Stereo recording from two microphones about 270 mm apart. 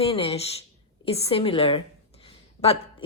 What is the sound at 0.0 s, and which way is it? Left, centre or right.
A woman's voice, left.